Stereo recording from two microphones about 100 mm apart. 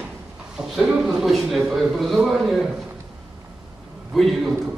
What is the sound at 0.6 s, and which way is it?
Speech, 5° right (ahead or behind).